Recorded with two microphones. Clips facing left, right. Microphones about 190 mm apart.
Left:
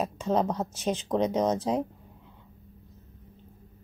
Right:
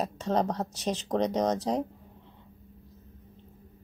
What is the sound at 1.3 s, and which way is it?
Speech, 5° left (ahead or behind).